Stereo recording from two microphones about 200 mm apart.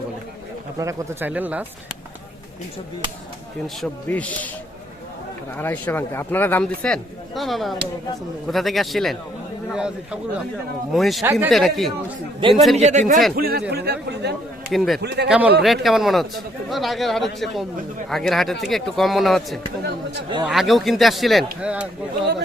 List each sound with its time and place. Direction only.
0.8 s speech: 15° right (ahead or behind)
3.8 s speech: 5° left (ahead or behind)
5.5 s a man's voice: 10° left (ahead or behind)
11.2 s speech: 15° right (ahead or behind)
11.5 s a man's voice: centre (ahead or behind)
12.4 s a man's voice: 25° right (ahead or behind)
13.3 s speech: 50° right (ahead or behind)
14.7 s a man's voice: centre (ahead or behind)
15.0 s speech: 55° right (ahead or behind)
15.3 s a man's voice: 5° right (ahead or behind)